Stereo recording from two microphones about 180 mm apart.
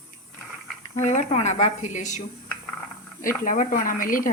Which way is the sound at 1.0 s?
40° left (ahead or behind).